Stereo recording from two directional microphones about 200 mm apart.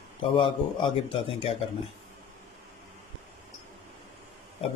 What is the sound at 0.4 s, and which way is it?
Speech, 25° left (ahead or behind).